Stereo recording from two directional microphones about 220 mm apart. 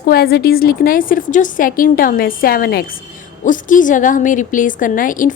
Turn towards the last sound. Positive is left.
turn(degrees=40)  # may be behind; listen again after turning